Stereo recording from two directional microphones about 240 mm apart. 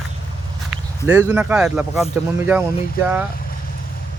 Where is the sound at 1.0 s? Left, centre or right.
Centre.